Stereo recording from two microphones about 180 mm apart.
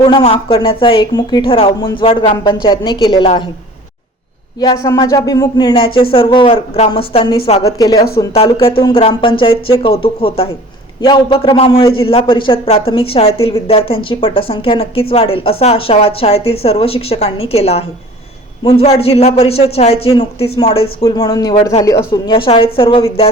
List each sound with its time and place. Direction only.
0.0 s speech: 30° left (ahead or behind)
4.6 s speech: 20° left (ahead or behind)
7.6 s a man's voice: 20° left (ahead or behind)
21.8 s speech: 20° left (ahead or behind)